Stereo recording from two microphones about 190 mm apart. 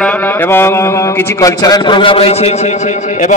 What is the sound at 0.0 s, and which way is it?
A man's voice, 10° left (ahead or behind).